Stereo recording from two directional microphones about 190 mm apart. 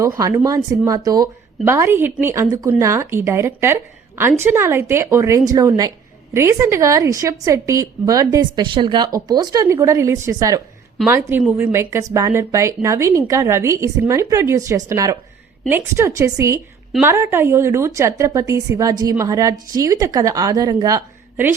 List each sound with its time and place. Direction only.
0.0 s a woman's voice: 15° right (ahead or behind)